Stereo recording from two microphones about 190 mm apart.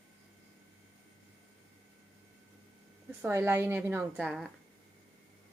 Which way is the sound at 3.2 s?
10° right (ahead or behind).